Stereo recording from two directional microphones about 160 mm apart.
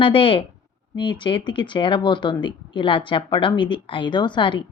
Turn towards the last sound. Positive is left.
turn(degrees=30)  # may be behind; listen again after turning